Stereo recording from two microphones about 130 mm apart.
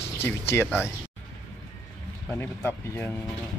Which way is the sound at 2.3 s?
15° left (ahead or behind).